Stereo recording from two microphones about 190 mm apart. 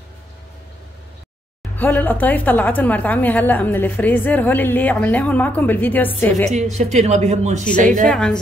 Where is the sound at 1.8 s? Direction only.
10° left (ahead or behind).